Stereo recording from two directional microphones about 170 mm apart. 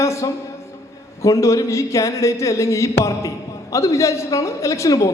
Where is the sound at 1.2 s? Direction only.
20° left (ahead or behind).